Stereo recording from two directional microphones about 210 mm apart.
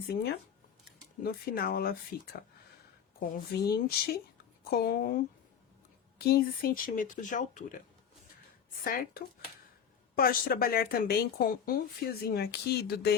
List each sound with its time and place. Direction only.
0.1 s speech: 50° left (ahead or behind)
3.7 s speech: 45° left (ahead or behind)
8.8 s speech: 45° left (ahead or behind)